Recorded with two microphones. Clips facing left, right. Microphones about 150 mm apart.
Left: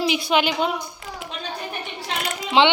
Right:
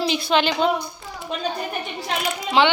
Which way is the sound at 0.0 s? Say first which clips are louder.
Even; 15° left (ahead or behind).